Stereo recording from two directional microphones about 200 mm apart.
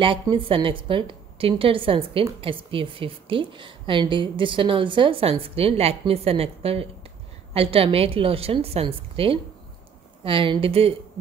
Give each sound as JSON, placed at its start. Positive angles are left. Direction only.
{"t": 0.0, "sound": "a woman's voice", "side_deg": -25}